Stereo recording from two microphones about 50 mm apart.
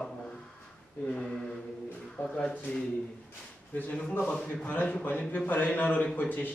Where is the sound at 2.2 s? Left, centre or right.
Left.